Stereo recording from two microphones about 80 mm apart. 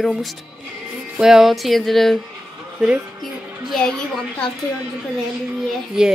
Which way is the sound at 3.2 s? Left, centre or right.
Centre.